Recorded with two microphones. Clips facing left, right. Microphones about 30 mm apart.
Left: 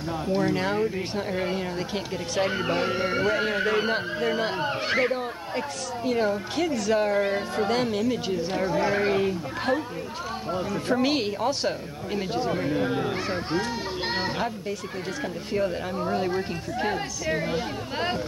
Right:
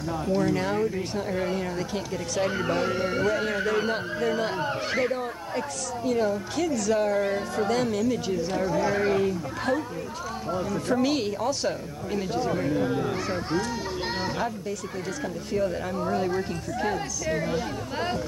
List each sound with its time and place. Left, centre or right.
0.3 s speech: left
15.5 s speech: left